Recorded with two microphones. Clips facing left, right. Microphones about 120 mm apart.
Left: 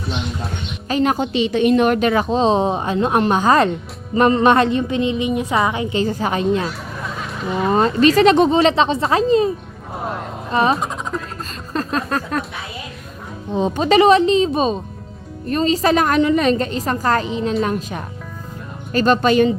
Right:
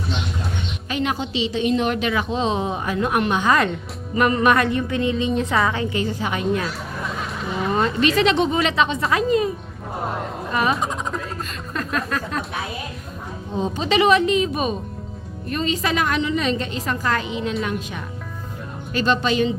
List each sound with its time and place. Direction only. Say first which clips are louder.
0.9 s a woman's voice: left 7 dB; 40° left (ahead or behind); by 6.0 s 15° left (ahead or behind)
6.1 s a woman's voice: left 5 dB; 40° left (ahead or behind)
7.7 s speech: left 6 dB; 35° left (ahead or behind)
8.4 s speech: left 5 dB; 30° left (ahead or behind)
9.9 s a man's voice: left 1 dB; centre (ahead or behind)
10.5 s a woman's voice: left 5 dB; 30° left (ahead or behind)
11.7 s a sound: left 4 dB; 30° left (ahead or behind)
13.7 s a woman's voice: left 6 dB; 45° left (ahead or behind)
14.1 s a woman's voice: left 4 dB; 30° left (ahead or behind); by 19.5 s 50° left (ahead or behind)